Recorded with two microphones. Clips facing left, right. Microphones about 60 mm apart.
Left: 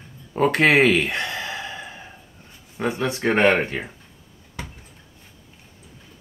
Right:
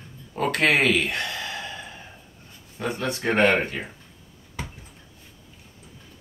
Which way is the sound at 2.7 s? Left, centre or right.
Left.